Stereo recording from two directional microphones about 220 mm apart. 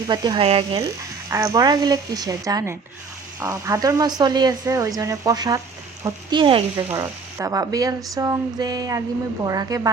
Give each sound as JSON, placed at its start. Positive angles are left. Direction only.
{"t": 0.1, "sound": "speech", "side_deg": -20}
{"t": 0.8, "sound": "speech", "side_deg": -15}